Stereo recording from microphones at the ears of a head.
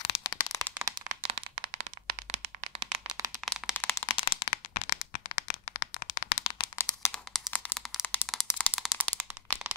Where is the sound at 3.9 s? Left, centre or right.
Left.